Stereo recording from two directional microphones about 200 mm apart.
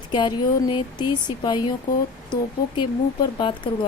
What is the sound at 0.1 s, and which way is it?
Speech, 20° left (ahead or behind).